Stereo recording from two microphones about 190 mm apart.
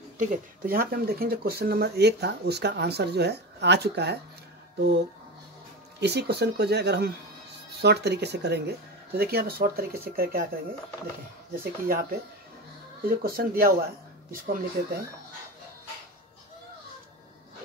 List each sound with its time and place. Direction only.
0.2 s speech: 45° right (ahead or behind)
5.9 s speech: 60° right (ahead or behind)